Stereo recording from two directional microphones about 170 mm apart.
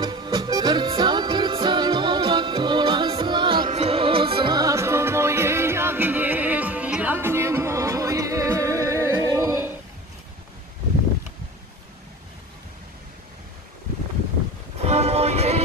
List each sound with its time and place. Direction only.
0.0 s music: 25° right (ahead or behind)
14.8 s music: 40° right (ahead or behind)